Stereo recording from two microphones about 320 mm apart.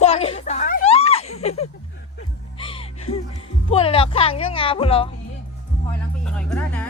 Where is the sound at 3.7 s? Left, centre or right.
Centre.